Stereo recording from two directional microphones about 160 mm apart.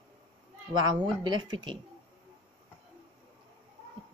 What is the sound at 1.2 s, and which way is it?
Speech, 25° right (ahead or behind).